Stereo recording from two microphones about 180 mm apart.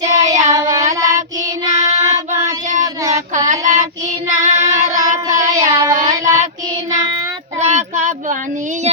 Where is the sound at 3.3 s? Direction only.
45° right (ahead or behind).